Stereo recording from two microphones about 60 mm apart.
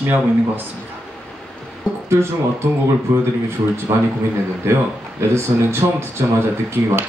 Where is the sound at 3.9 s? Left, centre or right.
Right.